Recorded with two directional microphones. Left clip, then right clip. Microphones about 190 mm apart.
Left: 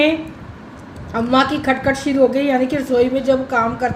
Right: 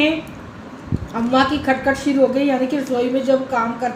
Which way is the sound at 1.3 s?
50° left (ahead or behind).